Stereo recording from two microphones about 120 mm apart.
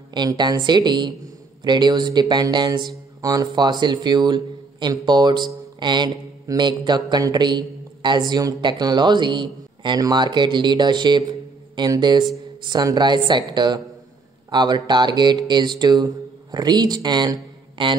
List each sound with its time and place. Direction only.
0.1 s speech: 35° right (ahead or behind)